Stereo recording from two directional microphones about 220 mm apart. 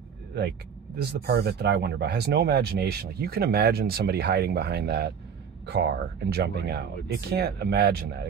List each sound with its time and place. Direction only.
1.2 s speech: 45° right (ahead or behind)